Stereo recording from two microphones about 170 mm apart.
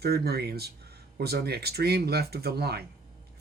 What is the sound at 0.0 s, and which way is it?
Speech, 70° right (ahead or behind).